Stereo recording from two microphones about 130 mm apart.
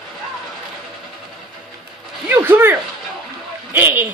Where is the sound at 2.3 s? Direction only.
15° right (ahead or behind).